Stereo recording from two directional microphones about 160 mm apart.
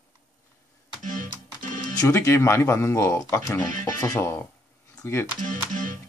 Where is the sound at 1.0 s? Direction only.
55° right (ahead or behind).